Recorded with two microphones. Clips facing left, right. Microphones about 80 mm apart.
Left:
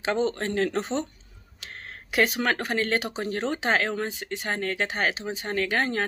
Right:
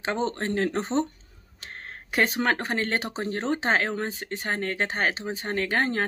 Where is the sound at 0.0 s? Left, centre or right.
Right.